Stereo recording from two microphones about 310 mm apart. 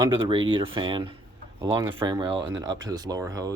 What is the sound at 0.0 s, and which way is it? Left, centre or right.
Speech, centre.